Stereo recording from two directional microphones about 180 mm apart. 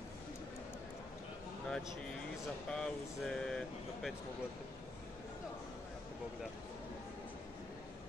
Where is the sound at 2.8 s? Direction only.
5° left (ahead or behind).